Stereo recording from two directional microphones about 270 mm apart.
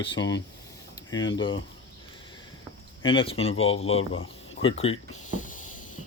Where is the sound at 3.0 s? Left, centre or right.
Centre.